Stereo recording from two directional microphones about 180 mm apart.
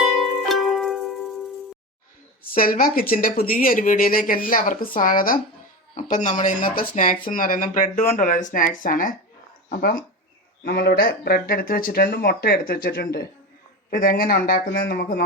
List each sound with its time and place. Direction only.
0.0 s music: centre (ahead or behind)
2.5 s speech: 50° left (ahead or behind)
10.6 s speech: 60° left (ahead or behind)